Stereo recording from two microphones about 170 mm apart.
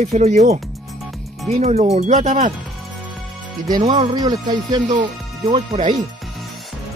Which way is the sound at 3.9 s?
25° right (ahead or behind).